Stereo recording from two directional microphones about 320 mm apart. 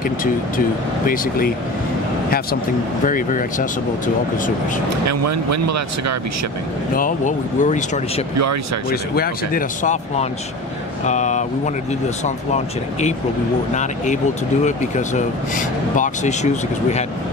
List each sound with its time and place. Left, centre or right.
1.0 s speech: left
3.1 s speech: left
4.8 s speech: right
7.0 s speech: left
9.1 s speech: left
14.6 s speech: left